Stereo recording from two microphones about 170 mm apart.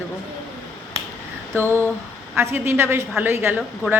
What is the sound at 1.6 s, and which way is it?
A woman's voice, 15° right (ahead or behind).